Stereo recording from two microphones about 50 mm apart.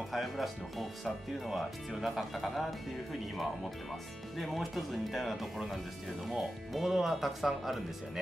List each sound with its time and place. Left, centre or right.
0.1 s speech: centre